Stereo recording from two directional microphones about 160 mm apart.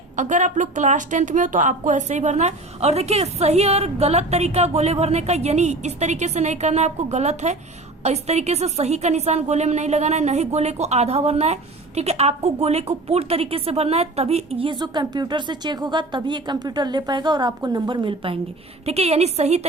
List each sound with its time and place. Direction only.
0.2 s a woman's voice: 50° right (ahead or behind)